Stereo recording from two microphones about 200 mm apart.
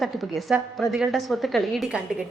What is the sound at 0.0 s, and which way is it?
A woman's voice, centre (ahead or behind).